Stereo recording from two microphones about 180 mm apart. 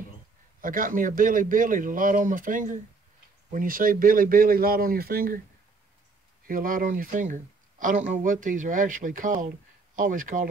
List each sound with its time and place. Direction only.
0.6 s speech: 50° right (ahead or behind)
6.4 s speech: 50° right (ahead or behind)